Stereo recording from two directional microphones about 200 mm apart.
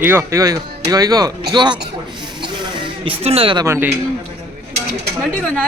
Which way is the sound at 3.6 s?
10° right (ahead or behind).